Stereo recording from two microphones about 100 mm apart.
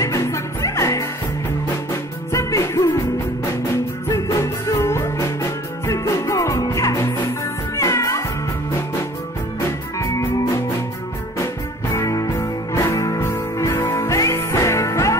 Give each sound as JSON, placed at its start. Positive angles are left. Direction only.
{"t": 0.0, "sound": "music", "side_deg": 30}
{"t": 4.1, "sound": "music", "side_deg": 25}
{"t": 9.9, "sound": "music", "side_deg": 30}
{"t": 11.9, "sound": "music", "side_deg": 30}